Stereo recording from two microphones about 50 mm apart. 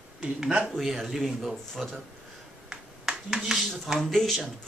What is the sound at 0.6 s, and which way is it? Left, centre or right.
Speech, centre.